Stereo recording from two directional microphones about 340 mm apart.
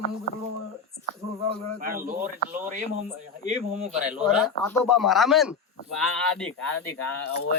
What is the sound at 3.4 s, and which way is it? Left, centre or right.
Speech, right.